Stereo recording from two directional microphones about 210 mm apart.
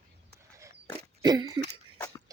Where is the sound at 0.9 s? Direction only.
20° right (ahead or behind).